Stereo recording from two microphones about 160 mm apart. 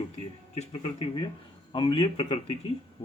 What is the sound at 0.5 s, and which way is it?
Speech, 40° left (ahead or behind).